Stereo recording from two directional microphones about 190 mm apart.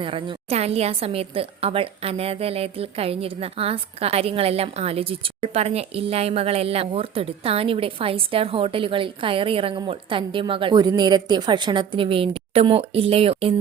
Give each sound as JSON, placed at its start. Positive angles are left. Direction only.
{"t": 0.0, "sound": "a woman's voice", "side_deg": -25}